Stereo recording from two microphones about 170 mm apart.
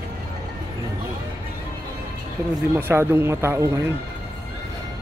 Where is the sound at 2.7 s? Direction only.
15° right (ahead or behind).